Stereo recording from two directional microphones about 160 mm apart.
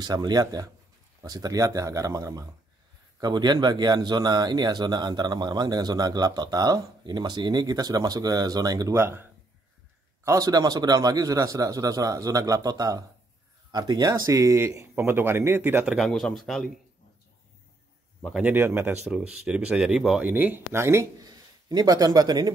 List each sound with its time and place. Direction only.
0.0 s speech: 25° right (ahead or behind); by 16.7 s centre (ahead or behind)
18.2 s speech: 5° right (ahead or behind)
19.1 s speech: 5° left (ahead or behind); by 22.5 s 25° right (ahead or behind)